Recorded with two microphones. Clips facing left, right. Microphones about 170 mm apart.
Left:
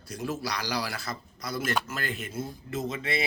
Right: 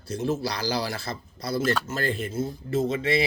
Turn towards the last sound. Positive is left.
turn(degrees=-30)  # may be behind; listen again after turning